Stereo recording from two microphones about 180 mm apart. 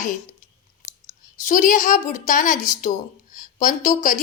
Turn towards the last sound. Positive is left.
turn(degrees=45)  # may be behind; listen again after turning